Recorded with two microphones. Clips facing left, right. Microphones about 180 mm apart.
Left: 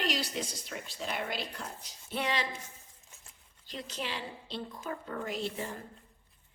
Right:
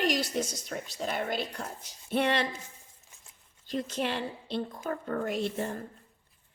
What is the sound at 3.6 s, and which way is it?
Speech, 50° right (ahead or behind).